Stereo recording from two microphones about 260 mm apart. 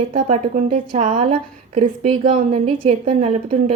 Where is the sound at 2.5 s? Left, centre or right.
Right.